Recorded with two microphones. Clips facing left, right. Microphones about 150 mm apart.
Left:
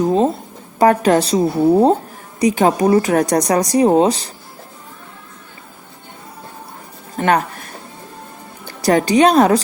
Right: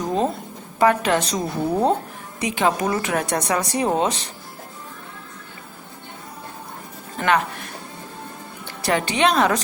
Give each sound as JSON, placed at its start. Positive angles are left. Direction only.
{"t": 0.0, "sound": "a sound", "side_deg": 35}
{"t": 0.8, "sound": "speech", "side_deg": 40}
{"t": 7.3, "sound": "music", "side_deg": 40}
{"t": 8.8, "sound": "speech", "side_deg": 40}